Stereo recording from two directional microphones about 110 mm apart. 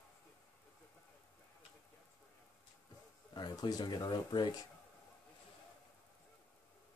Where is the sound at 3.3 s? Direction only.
40° left (ahead or behind).